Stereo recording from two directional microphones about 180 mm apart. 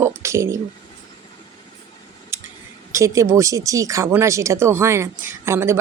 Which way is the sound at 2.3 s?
15° right (ahead or behind).